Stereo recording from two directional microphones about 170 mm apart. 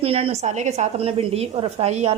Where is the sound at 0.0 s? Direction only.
35° right (ahead or behind).